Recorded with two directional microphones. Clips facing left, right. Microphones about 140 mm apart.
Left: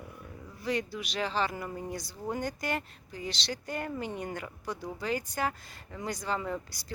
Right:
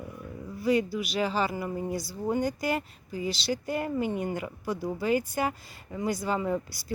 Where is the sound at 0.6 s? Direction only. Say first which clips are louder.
Right 7 dB; 5° right (ahead or behind).